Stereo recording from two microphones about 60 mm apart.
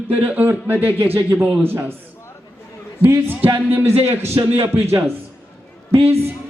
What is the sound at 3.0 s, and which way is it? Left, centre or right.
Speech, right.